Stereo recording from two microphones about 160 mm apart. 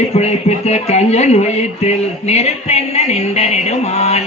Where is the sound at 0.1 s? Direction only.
45° left (ahead or behind).